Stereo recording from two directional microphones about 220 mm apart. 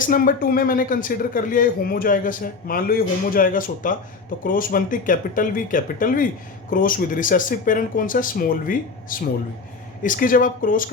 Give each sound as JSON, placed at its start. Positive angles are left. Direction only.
{"t": 0.0, "sound": "speech", "side_deg": 40}